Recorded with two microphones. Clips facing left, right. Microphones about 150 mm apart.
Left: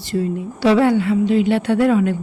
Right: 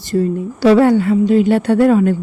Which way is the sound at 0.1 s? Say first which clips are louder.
Right 5 dB; 45° right (ahead or behind).